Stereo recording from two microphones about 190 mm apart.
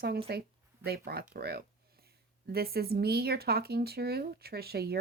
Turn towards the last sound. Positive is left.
turn(degrees=-55)  # may be behind; listen again after turning